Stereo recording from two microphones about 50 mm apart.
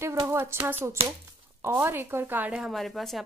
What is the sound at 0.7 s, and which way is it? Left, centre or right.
A woman's voice, right.